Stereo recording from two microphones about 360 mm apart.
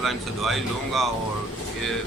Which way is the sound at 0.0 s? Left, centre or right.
Centre.